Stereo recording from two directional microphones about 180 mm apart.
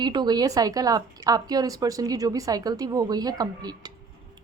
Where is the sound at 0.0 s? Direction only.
25° right (ahead or behind).